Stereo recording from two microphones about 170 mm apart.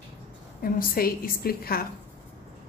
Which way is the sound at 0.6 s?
60° left (ahead or behind).